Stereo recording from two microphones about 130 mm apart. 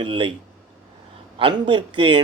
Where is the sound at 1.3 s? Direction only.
40° right (ahead or behind).